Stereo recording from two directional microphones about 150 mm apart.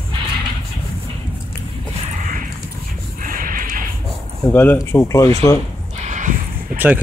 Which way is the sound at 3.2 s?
70° right (ahead or behind).